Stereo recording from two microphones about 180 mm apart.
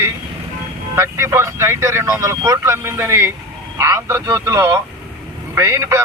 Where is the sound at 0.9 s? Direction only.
15° right (ahead or behind).